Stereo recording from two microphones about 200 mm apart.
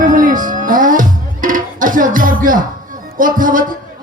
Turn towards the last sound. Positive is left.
turn(degrees=-45)  # may be behind; listen again after turning